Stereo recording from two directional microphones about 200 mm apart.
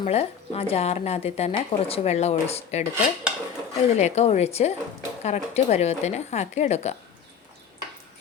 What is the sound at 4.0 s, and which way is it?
A woman's voice, 35° left (ahead or behind).